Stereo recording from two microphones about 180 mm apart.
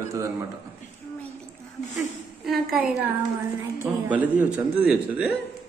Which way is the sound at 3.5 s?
15° right (ahead or behind).